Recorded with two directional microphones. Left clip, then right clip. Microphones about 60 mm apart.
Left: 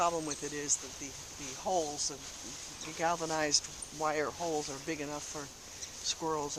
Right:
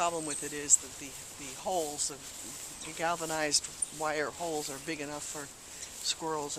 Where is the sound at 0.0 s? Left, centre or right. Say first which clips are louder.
Even; right.